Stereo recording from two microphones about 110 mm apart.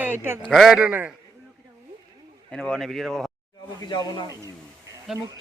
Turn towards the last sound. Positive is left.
turn(degrees=-5)  # may be behind; listen again after turning